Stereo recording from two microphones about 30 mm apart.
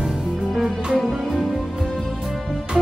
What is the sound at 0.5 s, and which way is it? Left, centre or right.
Music, centre.